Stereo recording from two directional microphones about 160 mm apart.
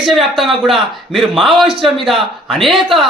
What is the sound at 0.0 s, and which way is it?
A man's voice, centre (ahead or behind).